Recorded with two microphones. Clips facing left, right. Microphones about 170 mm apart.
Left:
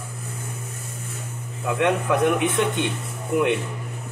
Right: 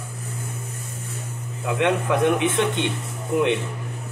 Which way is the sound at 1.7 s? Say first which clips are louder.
Even; 20° right (ahead or behind).